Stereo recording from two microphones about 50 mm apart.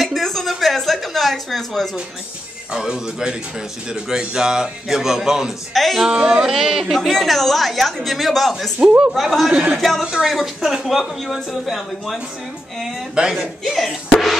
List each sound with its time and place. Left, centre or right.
0.0 s speech: centre
2.7 s a man's voice: centre
5.7 s a woman's voice: centre
6.1 s a man's voice: centre
6.5 s a woman's voice: centre
9.5 s speech: right
9.8 s a woman's voice: centre
13.7 s music: centre